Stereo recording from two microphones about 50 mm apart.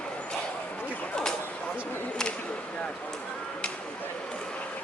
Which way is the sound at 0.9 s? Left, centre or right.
Left.